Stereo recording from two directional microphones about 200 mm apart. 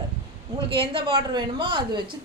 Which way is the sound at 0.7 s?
25° right (ahead or behind).